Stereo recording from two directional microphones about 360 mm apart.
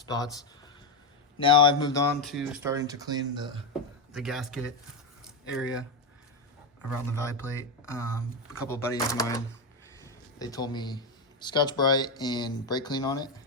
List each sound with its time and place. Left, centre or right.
0.0 s speech: centre
1.4 s speech: centre
7.0 s speech: centre